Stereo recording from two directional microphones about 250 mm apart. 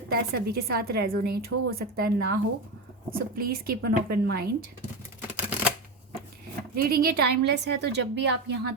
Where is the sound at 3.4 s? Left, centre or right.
Right.